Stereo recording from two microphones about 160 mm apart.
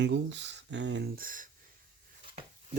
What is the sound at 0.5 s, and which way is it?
Speech, 90° right.